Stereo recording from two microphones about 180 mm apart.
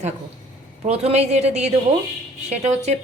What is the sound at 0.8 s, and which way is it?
A woman's voice, 35° right (ahead or behind).